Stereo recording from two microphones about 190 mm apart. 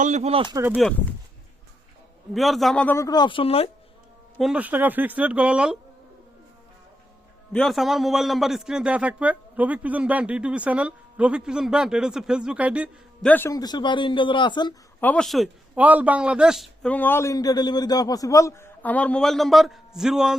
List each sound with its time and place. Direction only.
0.0 s speech: 35° right (ahead or behind)
2.3 s speech: centre (ahead or behind); by 3.7 s 30° left (ahead or behind)
4.4 s speech: 5° right (ahead or behind)
7.5 s a man's voice: centre (ahead or behind)
13.2 s speech: 10° left (ahead or behind)
15.0 s a man's voice: 5° left (ahead or behind)